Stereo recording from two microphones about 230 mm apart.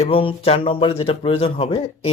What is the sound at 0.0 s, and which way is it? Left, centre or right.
Speech, left.